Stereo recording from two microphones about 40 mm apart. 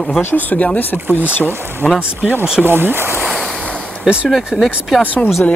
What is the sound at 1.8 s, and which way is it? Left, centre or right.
Speech, centre.